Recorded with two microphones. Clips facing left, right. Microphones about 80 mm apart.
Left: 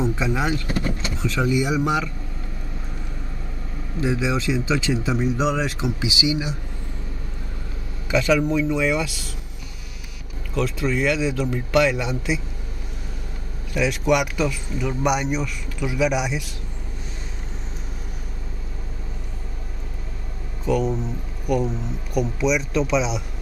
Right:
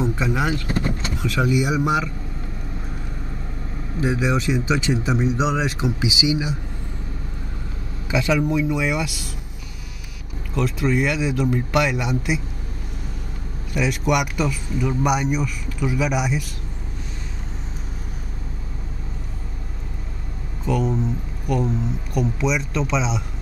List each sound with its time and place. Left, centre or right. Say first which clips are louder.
0.0 s speech: right 1 dB; centre
0.7 s speech: right 1 dB; right
1.1 s a man's voice: right 1 dB; centre
4.0 s a man's voice: right 1 dB; centre
8.1 s a man's voice: left 1 dB; centre
10.5 s a man's voice: right 2 dB; centre
13.7 s speech: left 1 dB; centre
20.6 s speech: even; centre